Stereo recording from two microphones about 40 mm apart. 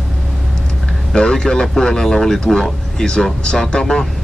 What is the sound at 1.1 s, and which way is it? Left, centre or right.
Speech, centre.